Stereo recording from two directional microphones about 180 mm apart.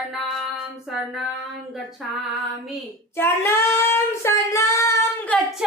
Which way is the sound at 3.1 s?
15° left (ahead or behind).